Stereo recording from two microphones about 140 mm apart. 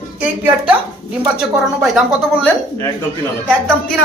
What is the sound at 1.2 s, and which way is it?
Speech, 5° right (ahead or behind).